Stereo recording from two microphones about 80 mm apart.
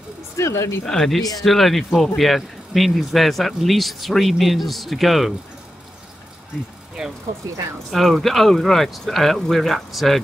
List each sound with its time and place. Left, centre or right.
0.4 s speech: left
0.8 s speech: centre
7.0 s speech: centre